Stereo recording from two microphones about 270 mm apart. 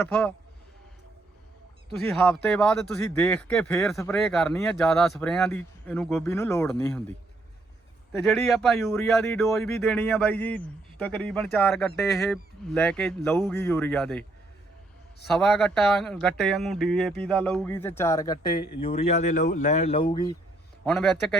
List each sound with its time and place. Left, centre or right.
0.0 s speech: centre
2.0 s speech: centre
8.2 s speech: centre
15.3 s speech: centre
20.8 s speech: centre